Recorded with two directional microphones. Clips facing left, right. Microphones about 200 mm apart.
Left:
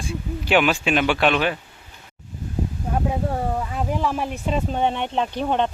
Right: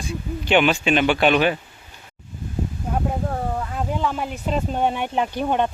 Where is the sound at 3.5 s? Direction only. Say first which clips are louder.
Left 1 dB; 5° left (ahead or behind).